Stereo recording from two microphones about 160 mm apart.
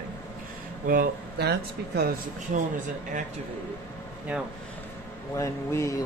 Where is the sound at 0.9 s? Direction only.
75° right (ahead or behind).